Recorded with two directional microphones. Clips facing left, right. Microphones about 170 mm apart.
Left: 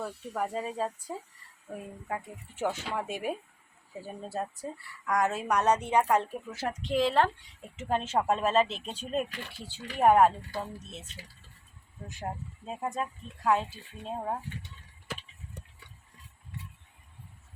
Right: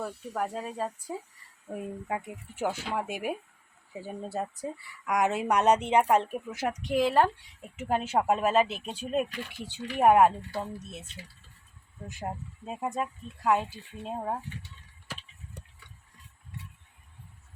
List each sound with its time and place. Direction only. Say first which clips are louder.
0.0 s speech: right 1 dB; centre (ahead or behind)
2.0 s speech: right 3 dB; 15° right (ahead or behind)
12.0 s speech: right 1 dB; 5° right (ahead or behind)